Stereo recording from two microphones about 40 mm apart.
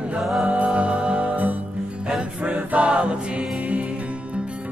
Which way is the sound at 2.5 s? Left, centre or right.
Right.